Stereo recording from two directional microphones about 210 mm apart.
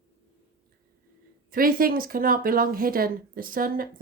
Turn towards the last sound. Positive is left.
turn(degrees=-40)  # may be behind; listen again after turning